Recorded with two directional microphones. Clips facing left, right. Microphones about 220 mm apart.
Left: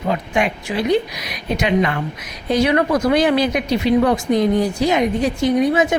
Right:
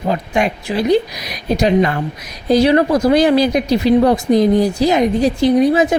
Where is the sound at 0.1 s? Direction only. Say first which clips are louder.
Right 2 dB; 40° right (ahead or behind).